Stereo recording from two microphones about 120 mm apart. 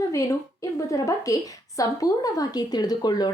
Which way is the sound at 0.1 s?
25° left (ahead or behind).